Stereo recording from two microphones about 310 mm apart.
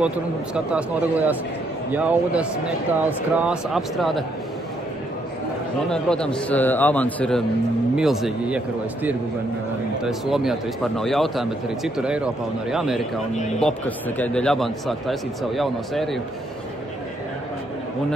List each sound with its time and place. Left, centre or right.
0.7 s speech: centre
5.9 s speech: centre